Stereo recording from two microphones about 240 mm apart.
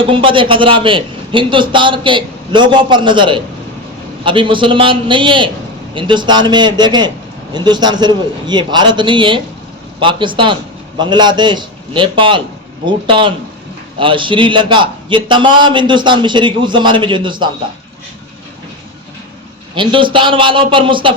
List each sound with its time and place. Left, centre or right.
0.0 s a man's voice: right
19.7 s a man's voice: right